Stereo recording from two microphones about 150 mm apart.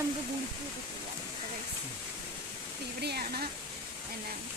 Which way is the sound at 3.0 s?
90° right.